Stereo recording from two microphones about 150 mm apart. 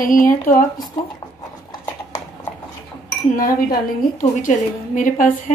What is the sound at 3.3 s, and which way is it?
A woman's voice, 70° left (ahead or behind).